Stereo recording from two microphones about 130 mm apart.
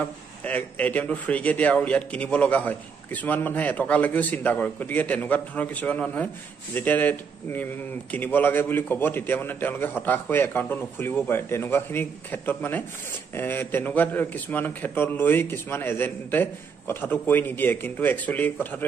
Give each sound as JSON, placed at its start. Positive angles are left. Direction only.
{"t": 0.0, "sound": "a man's voice", "side_deg": 15}